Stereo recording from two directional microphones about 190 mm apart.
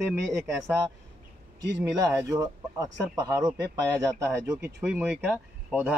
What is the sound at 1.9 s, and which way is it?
Speech, 15° right (ahead or behind).